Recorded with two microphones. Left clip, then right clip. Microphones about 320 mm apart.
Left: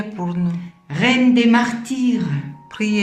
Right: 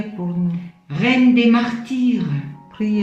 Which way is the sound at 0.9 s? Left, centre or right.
Left.